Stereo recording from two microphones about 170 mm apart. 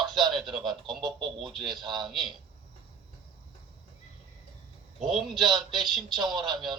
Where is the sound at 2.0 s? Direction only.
Centre (ahead or behind).